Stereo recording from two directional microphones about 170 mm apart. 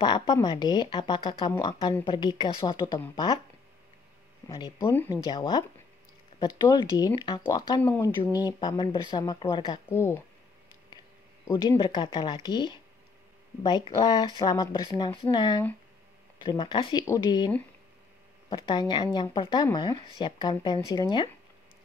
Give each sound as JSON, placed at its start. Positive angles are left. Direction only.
{"t": 0.3, "sound": "speech", "side_deg": 25}
{"t": 4.5, "sound": "speech", "side_deg": 20}
{"t": 7.8, "sound": "speech", "side_deg": 10}
{"t": 8.5, "sound": "speech", "side_deg": 25}
{"t": 9.8, "sound": "speech", "side_deg": 15}
{"t": 11.4, "sound": "speech", "side_deg": 15}
{"t": 11.8, "sound": "speech", "side_deg": 30}
{"t": 18.5, "sound": "speech", "side_deg": 25}